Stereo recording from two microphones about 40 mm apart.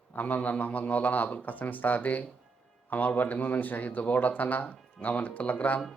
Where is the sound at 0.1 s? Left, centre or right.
Left.